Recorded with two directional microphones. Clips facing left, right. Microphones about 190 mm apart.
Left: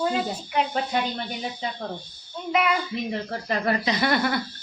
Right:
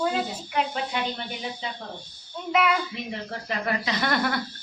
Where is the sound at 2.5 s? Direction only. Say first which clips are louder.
Even; centre (ahead or behind).